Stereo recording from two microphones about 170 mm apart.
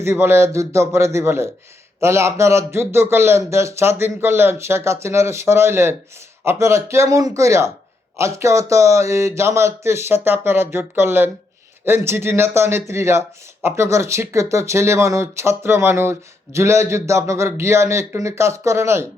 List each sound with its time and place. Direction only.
0.0 s speech: 15° right (ahead or behind)